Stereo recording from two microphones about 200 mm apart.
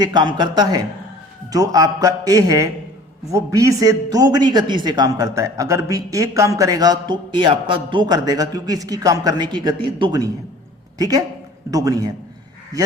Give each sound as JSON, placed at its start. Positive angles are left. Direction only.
{"t": 0.0, "sound": "a man's voice", "side_deg": -20}
{"t": 10.9, "sound": "a man's voice", "side_deg": -20}